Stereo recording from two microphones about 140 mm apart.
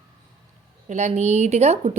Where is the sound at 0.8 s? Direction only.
55° right (ahead or behind).